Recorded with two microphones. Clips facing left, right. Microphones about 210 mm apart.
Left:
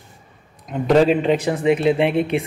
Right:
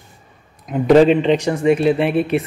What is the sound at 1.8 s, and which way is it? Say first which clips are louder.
Speech: right 1 dB; 15° left (ahead or behind).